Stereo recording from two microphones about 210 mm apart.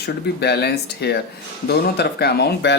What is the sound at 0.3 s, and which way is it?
Speech, 50° left (ahead or behind).